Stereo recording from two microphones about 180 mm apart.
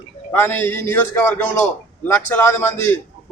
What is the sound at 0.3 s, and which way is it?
A man's voice, 10° left (ahead or behind).